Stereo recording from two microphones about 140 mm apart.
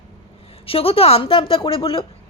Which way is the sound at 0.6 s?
45° left (ahead or behind).